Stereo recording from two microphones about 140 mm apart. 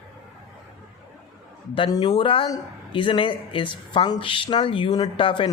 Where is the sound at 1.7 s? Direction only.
35° left (ahead or behind).